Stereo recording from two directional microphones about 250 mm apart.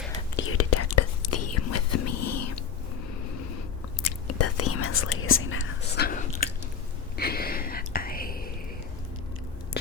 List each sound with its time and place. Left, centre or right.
0.3 s whispering: left
4.4 s whispering: left
6.1 s biting: left
7.2 s whispering: left